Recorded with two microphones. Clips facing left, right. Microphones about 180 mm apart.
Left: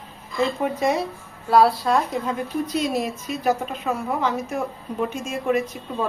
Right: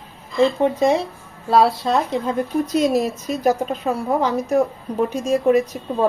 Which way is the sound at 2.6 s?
45° right (ahead or behind).